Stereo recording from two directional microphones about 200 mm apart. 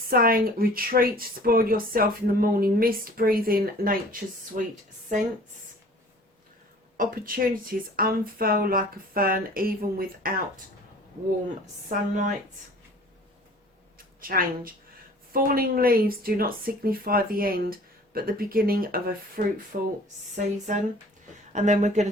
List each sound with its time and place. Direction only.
0.1 s speech: 45° right (ahead or behind)
6.9 s speech: 45° right (ahead or behind)
11.6 s speech: 40° right (ahead or behind)
14.2 s speech: 45° right (ahead or behind)